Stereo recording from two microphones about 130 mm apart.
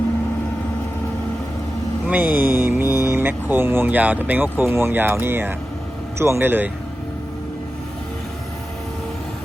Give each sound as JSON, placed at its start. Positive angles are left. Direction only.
{"t": 2.0, "sound": "speech", "side_deg": -15}